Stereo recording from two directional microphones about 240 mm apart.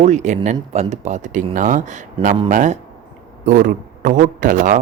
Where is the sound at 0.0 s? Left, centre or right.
Right.